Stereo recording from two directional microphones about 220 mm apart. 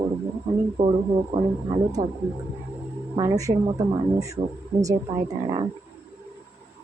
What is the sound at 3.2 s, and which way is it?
A woman's voice, 15° right (ahead or behind).